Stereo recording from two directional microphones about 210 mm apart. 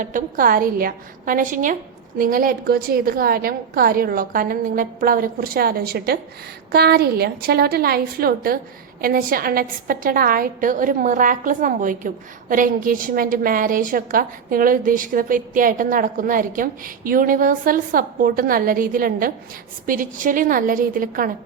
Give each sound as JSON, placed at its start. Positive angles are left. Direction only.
{"t": 0.0, "sound": "a woman's voice", "side_deg": -40}